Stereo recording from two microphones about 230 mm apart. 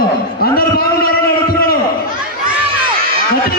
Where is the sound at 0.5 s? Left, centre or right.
Left.